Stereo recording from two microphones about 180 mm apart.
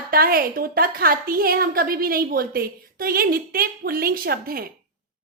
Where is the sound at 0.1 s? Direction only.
55° right (ahead or behind).